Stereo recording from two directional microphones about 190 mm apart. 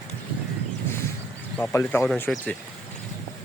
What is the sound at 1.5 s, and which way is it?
Speech, 10° left (ahead or behind).